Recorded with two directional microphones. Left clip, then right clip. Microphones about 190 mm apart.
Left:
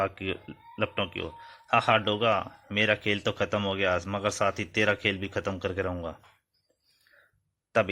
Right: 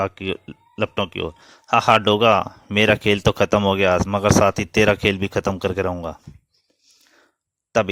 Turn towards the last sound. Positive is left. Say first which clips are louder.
# right 6 dB
turn(degrees=-45)  # may be behind; listen again after turning